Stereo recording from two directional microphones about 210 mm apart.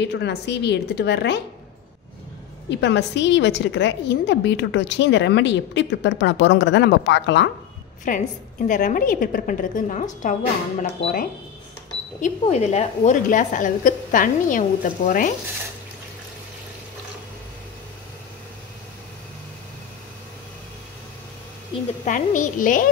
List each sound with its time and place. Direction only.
0.0 s a woman's voice: 55° left (ahead or behind)
2.8 s a woman's voice: 60° left (ahead or behind)
8.1 s a woman's voice: 40° left (ahead or behind)
22.0 s a woman's voice: 40° left (ahead or behind)